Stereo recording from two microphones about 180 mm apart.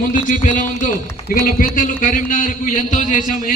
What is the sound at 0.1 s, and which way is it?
A man's voice, 45° left (ahead or behind).